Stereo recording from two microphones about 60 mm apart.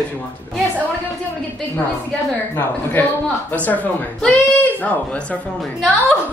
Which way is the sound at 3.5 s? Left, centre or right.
Left.